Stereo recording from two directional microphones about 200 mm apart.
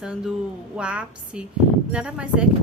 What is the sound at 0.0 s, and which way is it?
A woman's voice, 5° right (ahead or behind).